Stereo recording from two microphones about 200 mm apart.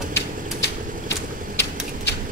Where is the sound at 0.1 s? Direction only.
55° left (ahead or behind).